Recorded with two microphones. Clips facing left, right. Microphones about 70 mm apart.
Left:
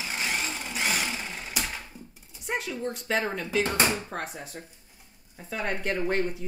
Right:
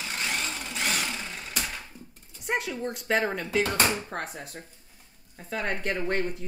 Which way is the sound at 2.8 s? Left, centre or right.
Centre.